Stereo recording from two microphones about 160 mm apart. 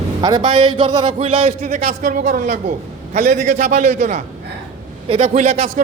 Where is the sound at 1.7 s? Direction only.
50° right (ahead or behind).